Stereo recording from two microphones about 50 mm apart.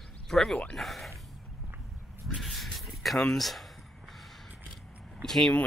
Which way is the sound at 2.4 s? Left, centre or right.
Centre.